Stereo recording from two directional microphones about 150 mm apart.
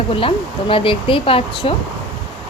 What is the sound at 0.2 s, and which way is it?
Speech, 35° left (ahead or behind).